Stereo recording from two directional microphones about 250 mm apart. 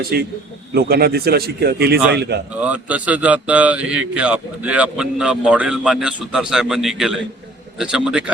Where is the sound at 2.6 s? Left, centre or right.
Centre.